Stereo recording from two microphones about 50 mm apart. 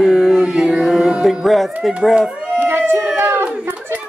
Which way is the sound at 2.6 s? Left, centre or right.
Right.